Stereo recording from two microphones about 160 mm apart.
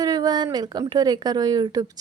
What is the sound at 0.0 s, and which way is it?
A woman's voice, 25° right (ahead or behind).